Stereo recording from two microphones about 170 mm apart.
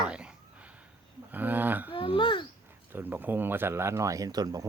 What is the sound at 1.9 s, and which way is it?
Speech, 30° left (ahead or behind).